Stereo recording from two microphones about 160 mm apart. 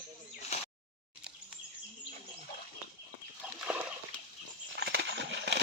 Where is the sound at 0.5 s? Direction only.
45° left (ahead or behind).